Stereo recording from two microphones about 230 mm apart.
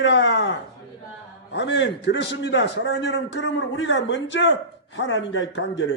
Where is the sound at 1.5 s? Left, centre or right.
Left.